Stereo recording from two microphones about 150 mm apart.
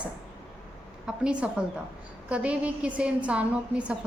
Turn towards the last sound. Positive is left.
turn(degrees=-10)  # may be behind; listen again after turning